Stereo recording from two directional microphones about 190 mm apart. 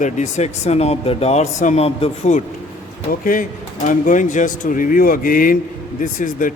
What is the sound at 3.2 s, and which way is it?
A man's voice, 45° left (ahead or behind).